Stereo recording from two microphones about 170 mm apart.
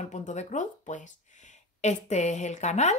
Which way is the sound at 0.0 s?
45° left (ahead or behind).